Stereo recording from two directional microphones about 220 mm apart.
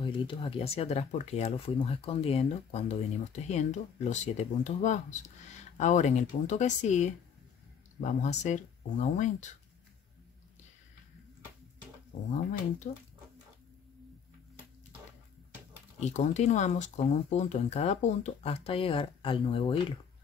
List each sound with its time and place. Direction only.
0.0 s speech: 20° left (ahead or behind)
12.9 s speech: 35° left (ahead or behind)
16.0 s speech: 30° left (ahead or behind)